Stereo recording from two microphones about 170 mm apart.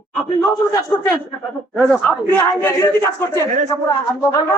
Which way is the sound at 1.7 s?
5° right (ahead or behind).